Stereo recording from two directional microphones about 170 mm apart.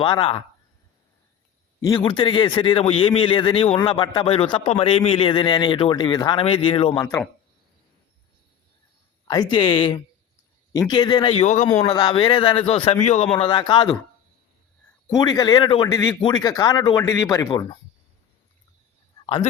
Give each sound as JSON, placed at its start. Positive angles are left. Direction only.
{"t": 0.0, "sound": "a man's voice", "side_deg": 30}
{"t": 1.8, "sound": "a man's voice", "side_deg": 25}
{"t": 7.0, "sound": "speech", "side_deg": 15}
{"t": 9.2, "sound": "a man's voice", "side_deg": 25}
{"t": 13.3, "sound": "a man's voice", "side_deg": 30}
{"t": 15.1, "sound": "a man's voice", "side_deg": 20}
{"t": 19.2, "sound": "speech", "side_deg": 35}